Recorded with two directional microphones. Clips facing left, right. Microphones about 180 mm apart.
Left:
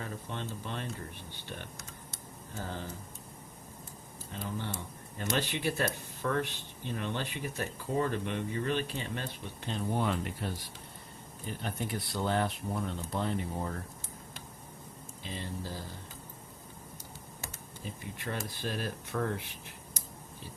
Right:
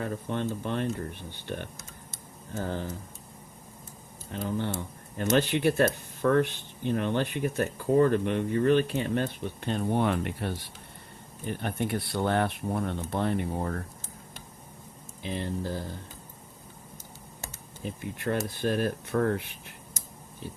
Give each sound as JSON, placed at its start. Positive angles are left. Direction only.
{"t": 0.0, "sound": "speech", "side_deg": -55}
{"t": 4.6, "sound": "speech", "side_deg": -55}
{"t": 15.2, "sound": "speech", "side_deg": -60}
{"t": 18.2, "sound": "speech", "side_deg": -50}